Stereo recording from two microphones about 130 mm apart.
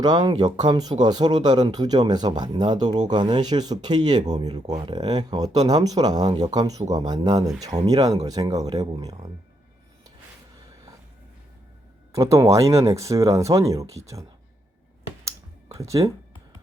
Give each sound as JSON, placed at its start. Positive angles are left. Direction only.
{"t": 0.0, "sound": "speech", "side_deg": -30}
{"t": 12.1, "sound": "speech", "side_deg": -25}
{"t": 15.7, "sound": "speech", "side_deg": -25}